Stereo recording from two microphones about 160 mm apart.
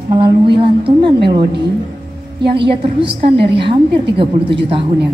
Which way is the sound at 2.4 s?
30° right (ahead or behind).